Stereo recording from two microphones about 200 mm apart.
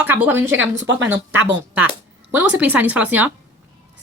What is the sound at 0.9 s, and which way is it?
Speech, 70° right (ahead or behind).